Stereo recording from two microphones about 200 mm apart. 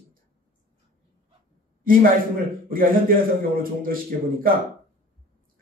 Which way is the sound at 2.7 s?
45° right (ahead or behind).